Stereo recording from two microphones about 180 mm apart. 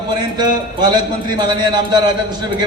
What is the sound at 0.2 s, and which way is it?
A man's voice, 25° right (ahead or behind).